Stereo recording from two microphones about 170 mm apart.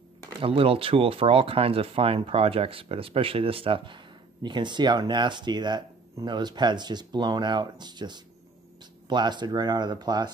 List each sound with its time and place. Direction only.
0.4 s speech: 35° right (ahead or behind)